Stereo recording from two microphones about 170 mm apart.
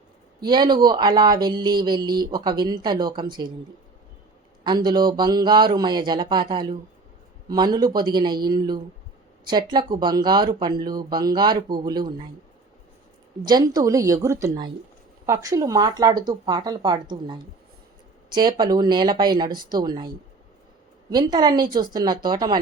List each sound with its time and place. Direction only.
0.4 s speech: 25° right (ahead or behind)
4.6 s speech: 25° right (ahead or behind)
13.4 s speech: 25° right (ahead or behind)